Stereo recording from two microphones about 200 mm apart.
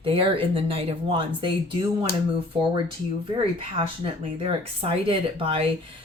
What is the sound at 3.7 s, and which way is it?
Speech, 30° right (ahead or behind).